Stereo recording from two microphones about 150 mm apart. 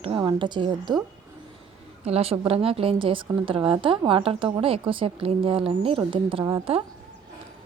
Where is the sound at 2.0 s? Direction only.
40° right (ahead or behind).